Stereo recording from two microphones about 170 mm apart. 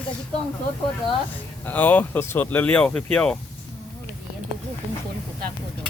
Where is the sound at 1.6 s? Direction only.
10° left (ahead or behind).